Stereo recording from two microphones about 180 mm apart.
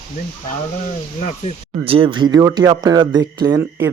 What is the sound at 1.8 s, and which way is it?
Speech, 30° right (ahead or behind).